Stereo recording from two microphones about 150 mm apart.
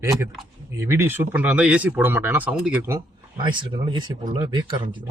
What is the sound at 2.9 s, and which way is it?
Speech, 30° right (ahead or behind).